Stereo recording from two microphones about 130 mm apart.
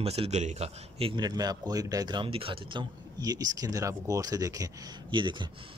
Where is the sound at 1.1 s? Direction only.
30° right (ahead or behind).